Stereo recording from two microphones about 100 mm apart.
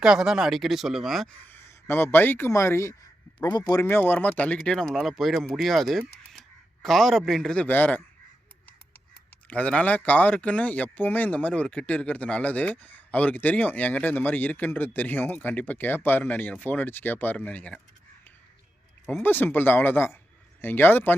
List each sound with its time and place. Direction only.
0.0 s speech: 5° right (ahead or behind)
1.5 s speech: 25° left (ahead or behind)
3.3 s a man's voice: 45° left (ahead or behind)
3.8 s speech: 25° left (ahead or behind)
9.5 s speech: 15° left (ahead or behind)
19.2 s speech: 20° left (ahead or behind)